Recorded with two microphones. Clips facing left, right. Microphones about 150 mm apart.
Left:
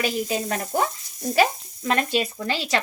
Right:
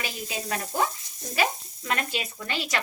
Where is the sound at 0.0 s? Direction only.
40° left (ahead or behind).